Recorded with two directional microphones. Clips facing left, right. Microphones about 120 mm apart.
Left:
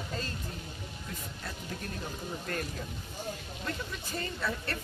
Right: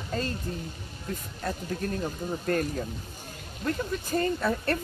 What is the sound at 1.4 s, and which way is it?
Speech, 45° right (ahead or behind).